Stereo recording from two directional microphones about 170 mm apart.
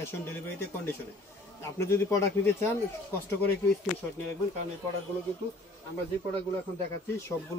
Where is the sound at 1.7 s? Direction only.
15° left (ahead or behind).